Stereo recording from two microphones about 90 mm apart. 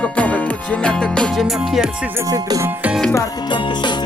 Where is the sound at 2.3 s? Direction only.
40° right (ahead or behind).